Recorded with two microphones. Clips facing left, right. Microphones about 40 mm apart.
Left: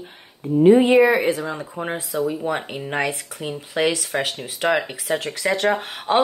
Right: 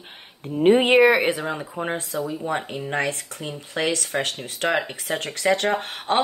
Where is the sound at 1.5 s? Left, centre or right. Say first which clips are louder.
Even; centre.